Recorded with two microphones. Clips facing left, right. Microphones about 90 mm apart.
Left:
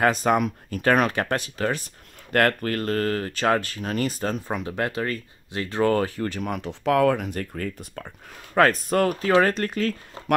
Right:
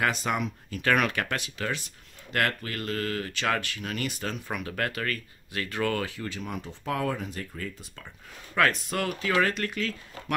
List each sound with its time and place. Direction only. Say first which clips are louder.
0.0 s speech: left 7 dB; 40° left (ahead or behind)
8.5 s speech: left 7 dB; 40° left (ahead or behind)